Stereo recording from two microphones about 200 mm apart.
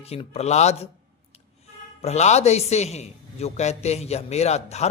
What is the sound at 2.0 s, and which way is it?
A woman's voice, 35° left (ahead or behind).